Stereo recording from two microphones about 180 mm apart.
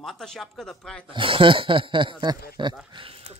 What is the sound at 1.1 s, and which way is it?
Speech, 30° right (ahead or behind).